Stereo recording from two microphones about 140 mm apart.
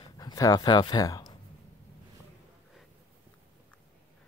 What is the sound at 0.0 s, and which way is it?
Speech, 30° left (ahead or behind).